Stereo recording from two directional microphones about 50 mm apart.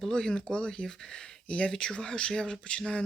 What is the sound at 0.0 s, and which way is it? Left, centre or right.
Speech, centre.